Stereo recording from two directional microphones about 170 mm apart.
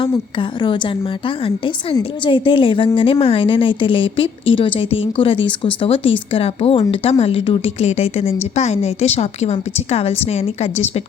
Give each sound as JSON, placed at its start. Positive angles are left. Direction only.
{"t": 0.3, "sound": "a woman's voice", "side_deg": 30}